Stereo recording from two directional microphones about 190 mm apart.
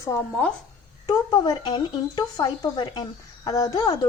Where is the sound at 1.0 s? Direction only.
20° left (ahead or behind).